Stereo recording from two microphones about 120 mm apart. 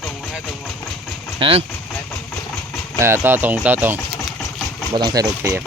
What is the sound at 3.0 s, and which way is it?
Speech, 20° right (ahead or behind).